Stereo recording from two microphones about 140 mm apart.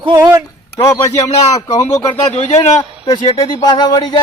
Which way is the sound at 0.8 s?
25° left (ahead or behind).